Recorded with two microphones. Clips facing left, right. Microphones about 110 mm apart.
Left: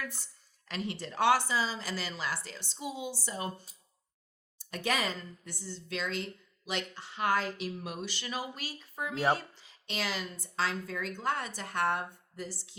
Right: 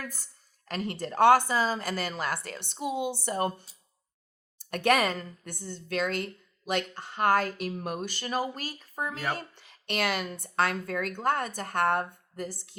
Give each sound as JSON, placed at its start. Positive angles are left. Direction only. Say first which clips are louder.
{"t": 0.0, "sound": "speech", "louder": "right 1 dB", "side_deg": -40}
{"t": 9.4, "sound": "speech", "louder": "right 5 dB", "side_deg": -60}